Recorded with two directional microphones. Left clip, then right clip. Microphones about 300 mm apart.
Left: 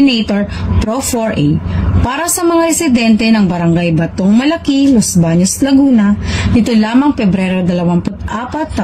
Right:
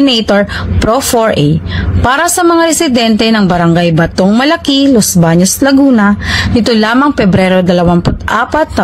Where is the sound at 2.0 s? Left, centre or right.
Right.